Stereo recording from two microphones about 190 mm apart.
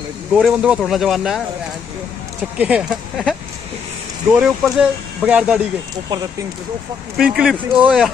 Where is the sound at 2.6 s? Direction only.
5° right (ahead or behind).